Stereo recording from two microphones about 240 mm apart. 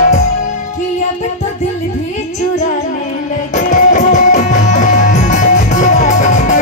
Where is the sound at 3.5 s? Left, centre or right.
Left.